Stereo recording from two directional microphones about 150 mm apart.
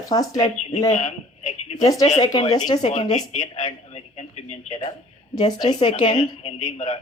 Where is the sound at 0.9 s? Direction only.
45° left (ahead or behind).